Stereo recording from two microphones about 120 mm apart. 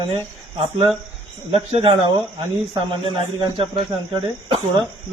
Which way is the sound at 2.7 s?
40° right (ahead or behind).